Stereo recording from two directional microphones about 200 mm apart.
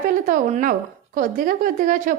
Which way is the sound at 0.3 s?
40° right (ahead or behind).